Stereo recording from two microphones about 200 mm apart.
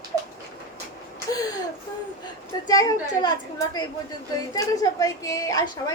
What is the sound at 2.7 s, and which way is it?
A woman's voice, 20° left (ahead or behind).